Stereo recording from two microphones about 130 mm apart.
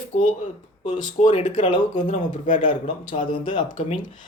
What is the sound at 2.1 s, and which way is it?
Speech, 80° left.